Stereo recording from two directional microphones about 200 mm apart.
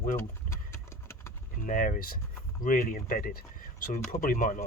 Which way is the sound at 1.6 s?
40° left (ahead or behind).